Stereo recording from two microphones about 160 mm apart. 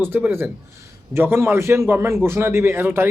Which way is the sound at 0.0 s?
15° right (ahead or behind).